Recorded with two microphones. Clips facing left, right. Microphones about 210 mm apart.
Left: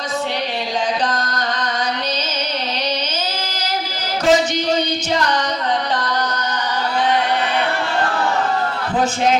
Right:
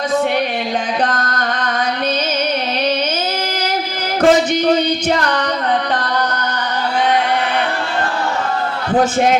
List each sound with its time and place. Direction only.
1.1 s music: 55° right (ahead or behind)
4.2 s music: 55° right (ahead or behind)